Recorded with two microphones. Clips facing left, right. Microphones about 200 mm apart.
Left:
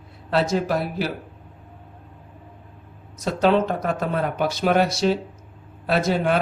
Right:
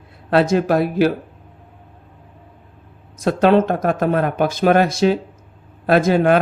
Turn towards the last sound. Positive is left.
turn(degrees=-50)  # may be behind; listen again after turning